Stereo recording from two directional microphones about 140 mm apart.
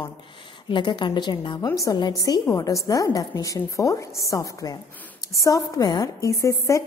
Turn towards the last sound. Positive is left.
turn(degrees=20)  # may be behind; listen again after turning